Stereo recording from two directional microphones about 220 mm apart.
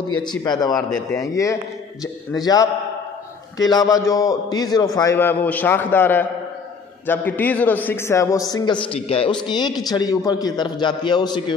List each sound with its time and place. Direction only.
0.2 s a man's voice: 20° left (ahead or behind)
0.7 s a man's voice: centre (ahead or behind)
1.1 s a man's voice: 15° left (ahead or behind)